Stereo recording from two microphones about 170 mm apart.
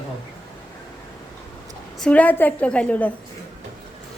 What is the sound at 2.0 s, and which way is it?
A woman's voice, 5° left (ahead or behind).